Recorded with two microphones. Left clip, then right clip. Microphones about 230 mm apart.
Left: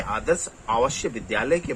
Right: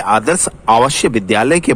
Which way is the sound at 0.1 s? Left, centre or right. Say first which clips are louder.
Right 11 dB; right.